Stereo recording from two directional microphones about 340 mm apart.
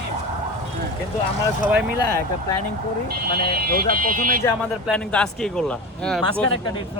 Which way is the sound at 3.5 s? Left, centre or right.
Right.